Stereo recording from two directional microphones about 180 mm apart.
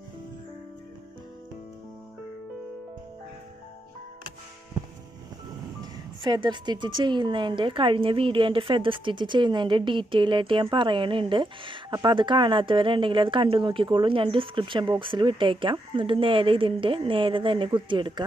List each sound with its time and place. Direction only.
5.8 s speech: 25° right (ahead or behind)